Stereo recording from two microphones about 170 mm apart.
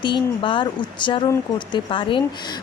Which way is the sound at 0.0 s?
30° left (ahead or behind).